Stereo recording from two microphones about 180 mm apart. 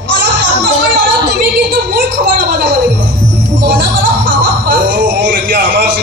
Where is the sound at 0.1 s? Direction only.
75° right (ahead or behind).